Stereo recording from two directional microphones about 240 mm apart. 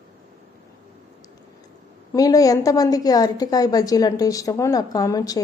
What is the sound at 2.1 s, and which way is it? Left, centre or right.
Speech, centre.